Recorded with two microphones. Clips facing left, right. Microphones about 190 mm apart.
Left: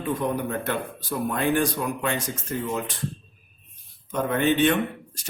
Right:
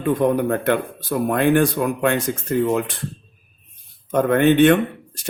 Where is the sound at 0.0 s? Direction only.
60° right (ahead or behind).